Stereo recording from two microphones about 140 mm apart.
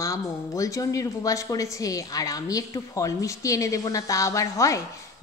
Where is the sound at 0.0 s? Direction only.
20° left (ahead or behind).